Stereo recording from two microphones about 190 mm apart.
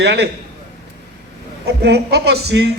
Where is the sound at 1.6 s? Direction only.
60° right (ahead or behind).